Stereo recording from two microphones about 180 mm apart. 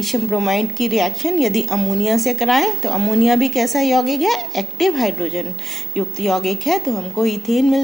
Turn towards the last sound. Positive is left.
turn(degrees=0)  # may be behind; listen again after turning